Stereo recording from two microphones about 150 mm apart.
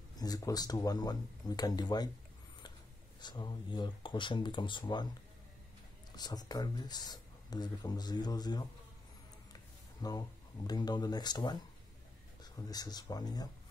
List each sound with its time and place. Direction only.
0.2 s speech: 25° left (ahead or behind)
3.2 s speech: 30° left (ahead or behind)
6.1 s speech: 25° left (ahead or behind)
10.0 s speech: 25° left (ahead or behind)
12.5 s speech: 25° left (ahead or behind)